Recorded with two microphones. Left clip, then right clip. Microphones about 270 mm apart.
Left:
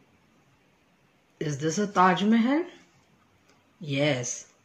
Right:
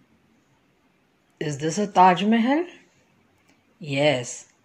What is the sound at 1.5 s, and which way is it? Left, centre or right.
Speech, left.